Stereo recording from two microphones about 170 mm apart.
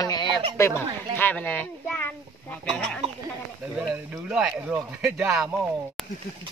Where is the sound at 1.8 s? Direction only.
5° left (ahead or behind).